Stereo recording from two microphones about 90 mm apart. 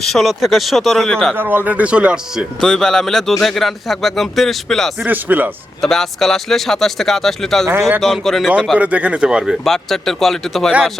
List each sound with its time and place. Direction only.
0.0 s speech: centre (ahead or behind)
1.4 s a man's voice: 20° right (ahead or behind)
2.6 s speech: 5° left (ahead or behind)
5.0 s speech: 20° right (ahead or behind)
5.8 s speech: 5° left (ahead or behind)
8.8 s a man's voice: 15° right (ahead or behind)
9.6 s speech: 5° left (ahead or behind)